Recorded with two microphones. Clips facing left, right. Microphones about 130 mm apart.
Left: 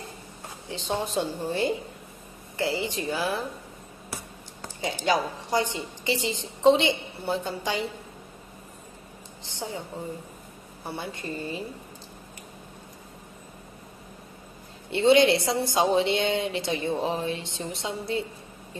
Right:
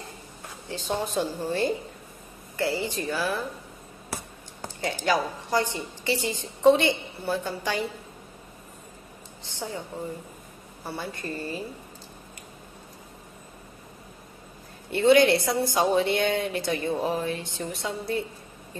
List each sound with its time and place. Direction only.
0.7 s a woman's voice: 20° left (ahead or behind)
4.8 s a woman's voice: 20° left (ahead or behind)
9.6 s a woman's voice: 25° left (ahead or behind)
10.8 s a woman's voice: 20° left (ahead or behind)
14.9 s a woman's voice: 25° left (ahead or behind)